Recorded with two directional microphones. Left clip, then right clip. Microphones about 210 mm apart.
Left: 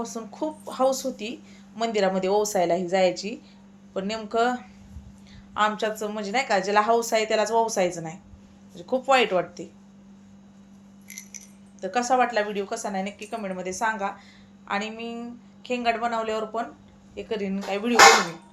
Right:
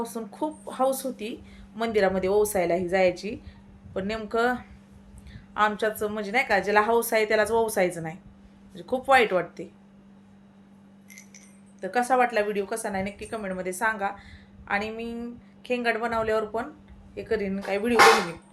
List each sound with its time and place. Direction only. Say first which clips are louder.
0.0 s a woman's voice: even; 15° right (ahead or behind)
11.8 s a woman's voice: even; 20° right (ahead or behind)